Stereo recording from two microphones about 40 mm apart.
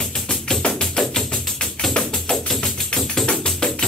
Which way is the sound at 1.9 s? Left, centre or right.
Centre.